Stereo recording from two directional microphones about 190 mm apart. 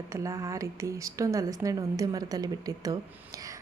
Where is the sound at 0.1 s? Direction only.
15° right (ahead or behind).